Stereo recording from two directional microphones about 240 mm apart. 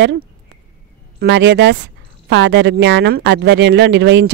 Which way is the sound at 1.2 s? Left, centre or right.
Right.